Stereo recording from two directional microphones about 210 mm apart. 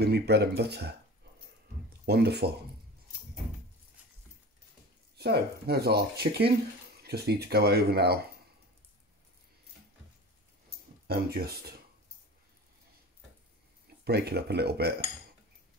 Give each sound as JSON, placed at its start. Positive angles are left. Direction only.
{"t": 0.0, "sound": "speech", "side_deg": -50}
{"t": 2.0, "sound": "speech", "side_deg": -50}
{"t": 5.1, "sound": "speech", "side_deg": -50}
{"t": 11.1, "sound": "speech", "side_deg": -45}
{"t": 14.0, "sound": "speech", "side_deg": -50}